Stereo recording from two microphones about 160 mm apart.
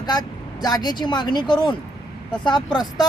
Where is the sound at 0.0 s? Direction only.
25° left (ahead or behind).